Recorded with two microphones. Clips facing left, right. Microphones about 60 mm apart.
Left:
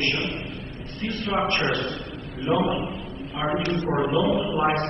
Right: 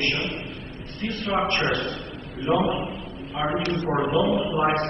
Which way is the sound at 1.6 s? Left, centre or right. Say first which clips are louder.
Even; right.